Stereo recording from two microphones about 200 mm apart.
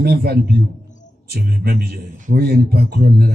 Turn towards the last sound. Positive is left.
turn(degrees=-50)  # may be behind; listen again after turning